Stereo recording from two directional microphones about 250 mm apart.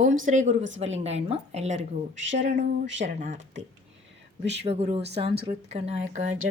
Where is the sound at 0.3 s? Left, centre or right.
Right.